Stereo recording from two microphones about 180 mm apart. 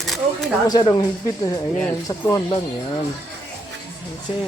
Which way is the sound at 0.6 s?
20° left (ahead or behind).